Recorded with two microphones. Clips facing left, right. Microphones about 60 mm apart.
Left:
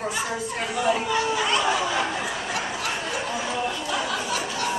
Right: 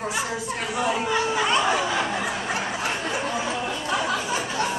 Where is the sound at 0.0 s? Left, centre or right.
Centre.